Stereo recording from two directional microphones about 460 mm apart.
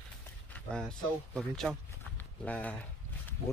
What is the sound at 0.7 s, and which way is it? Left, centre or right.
Speech, centre.